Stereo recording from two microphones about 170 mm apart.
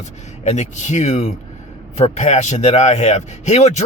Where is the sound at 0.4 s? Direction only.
40° left (ahead or behind).